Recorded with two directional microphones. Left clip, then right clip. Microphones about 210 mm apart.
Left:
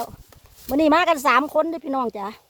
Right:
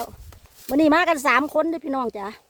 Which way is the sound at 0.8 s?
10° left (ahead or behind).